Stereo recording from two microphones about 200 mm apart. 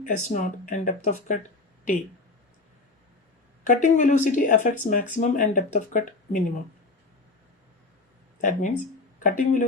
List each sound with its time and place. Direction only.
0.0 s speech: 40° left (ahead or behind)
3.7 s speech: 40° left (ahead or behind)
8.4 s speech: 40° left (ahead or behind)